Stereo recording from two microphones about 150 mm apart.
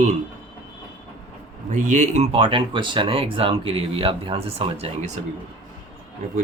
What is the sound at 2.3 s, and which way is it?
Speech, 35° right (ahead or behind).